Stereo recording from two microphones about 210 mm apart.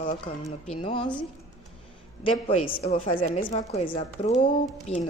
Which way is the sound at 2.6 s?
25° left (ahead or behind).